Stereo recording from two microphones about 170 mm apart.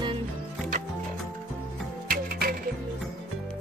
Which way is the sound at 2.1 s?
60° right (ahead or behind).